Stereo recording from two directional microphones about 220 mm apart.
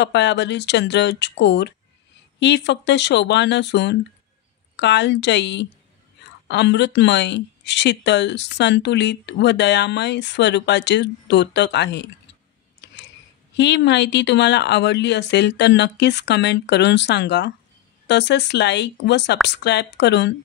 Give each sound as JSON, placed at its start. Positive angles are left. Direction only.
{"t": 0.0, "sound": "speech", "side_deg": 50}
{"t": 12.8, "sound": "a sound", "side_deg": 55}
{"t": 13.6, "sound": "speech", "side_deg": 50}